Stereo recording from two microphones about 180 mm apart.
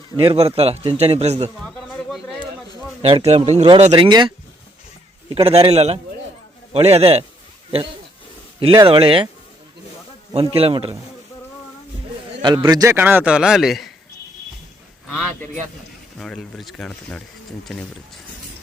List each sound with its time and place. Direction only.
0.2 s a man's voice: 35° right (ahead or behind)
1.6 s a sound: 5° left (ahead or behind)
3.0 s a man's voice: 35° right (ahead or behind)
5.3 s a man's voice: 35° right (ahead or behind)
8.6 s a man's voice: 25° right (ahead or behind)
10.3 s a man's voice: 30° right (ahead or behind)
12.4 s a man's voice: 25° right (ahead or behind); by 13.9 s centre (ahead or behind)
16.1 s a man's voice: 5° left (ahead or behind)